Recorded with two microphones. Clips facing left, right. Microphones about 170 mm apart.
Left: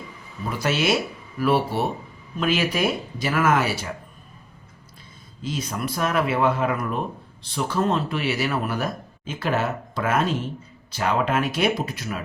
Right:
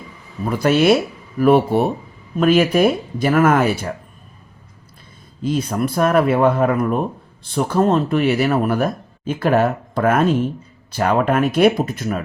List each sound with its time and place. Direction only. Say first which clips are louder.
0.5 s speech: right 8 dB; 55° right (ahead or behind)
5.4 s speech: right 9 dB; 55° right (ahead or behind)